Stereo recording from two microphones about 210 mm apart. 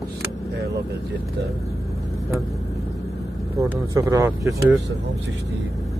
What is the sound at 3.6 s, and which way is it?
Speech, 15° right (ahead or behind).